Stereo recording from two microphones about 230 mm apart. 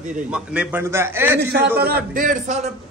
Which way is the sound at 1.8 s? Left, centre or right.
Right.